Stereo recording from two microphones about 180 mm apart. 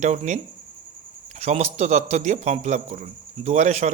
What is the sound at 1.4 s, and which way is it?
A man's voice, 35° right (ahead or behind).